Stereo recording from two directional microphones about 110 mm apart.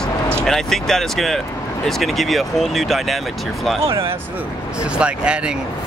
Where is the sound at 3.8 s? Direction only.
55° right (ahead or behind).